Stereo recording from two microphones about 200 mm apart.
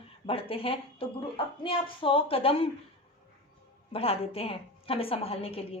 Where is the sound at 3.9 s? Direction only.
30° left (ahead or behind).